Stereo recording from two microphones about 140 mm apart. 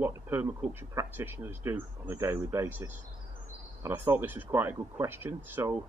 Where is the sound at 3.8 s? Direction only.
15° right (ahead or behind).